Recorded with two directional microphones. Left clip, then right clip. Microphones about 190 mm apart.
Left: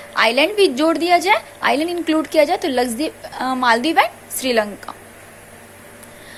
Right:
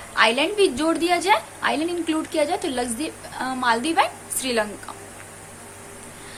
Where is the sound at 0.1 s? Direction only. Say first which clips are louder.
Left 4 dB; 30° left (ahead or behind).